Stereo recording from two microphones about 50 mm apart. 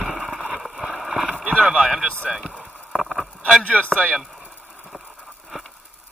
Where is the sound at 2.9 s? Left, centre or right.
Centre.